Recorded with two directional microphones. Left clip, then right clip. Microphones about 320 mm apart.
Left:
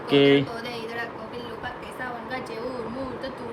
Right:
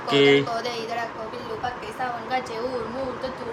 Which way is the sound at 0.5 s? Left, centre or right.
Centre.